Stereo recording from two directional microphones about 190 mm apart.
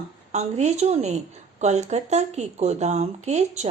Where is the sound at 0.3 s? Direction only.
35° right (ahead or behind).